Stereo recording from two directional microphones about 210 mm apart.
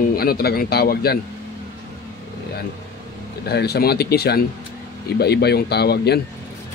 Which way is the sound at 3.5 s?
50° left (ahead or behind).